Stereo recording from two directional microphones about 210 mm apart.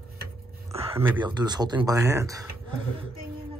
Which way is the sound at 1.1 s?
20° right (ahead or behind).